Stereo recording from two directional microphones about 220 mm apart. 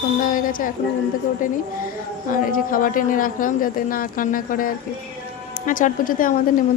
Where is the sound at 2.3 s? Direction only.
40° left (ahead or behind).